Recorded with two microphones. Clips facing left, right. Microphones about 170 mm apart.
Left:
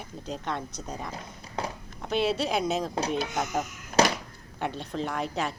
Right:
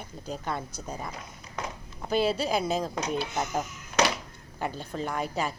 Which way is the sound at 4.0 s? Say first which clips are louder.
Left 3 dB; 35° left (ahead or behind).